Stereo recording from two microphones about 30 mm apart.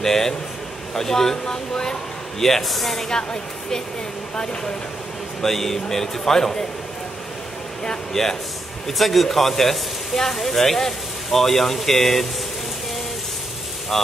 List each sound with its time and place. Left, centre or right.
0.0 s speech: centre
2.4 s speech: centre
3.1 s speech: left
5.4 s speech: centre
8.1 s speech: centre
8.8 s speech: centre
13.9 s speech: centre